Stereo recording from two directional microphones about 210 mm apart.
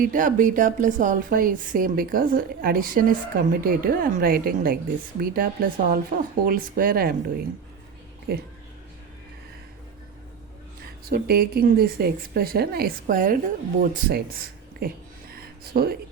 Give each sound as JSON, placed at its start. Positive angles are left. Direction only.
{"t": 0.0, "sound": "speech", "side_deg": -40}
{"t": 8.3, "sound": "speech", "side_deg": -50}
{"t": 11.0, "sound": "speech", "side_deg": -45}
{"t": 13.9, "sound": "a sound", "side_deg": -45}